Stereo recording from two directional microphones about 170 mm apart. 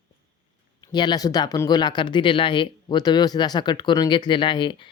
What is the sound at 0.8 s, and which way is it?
Speech, 25° left (ahead or behind).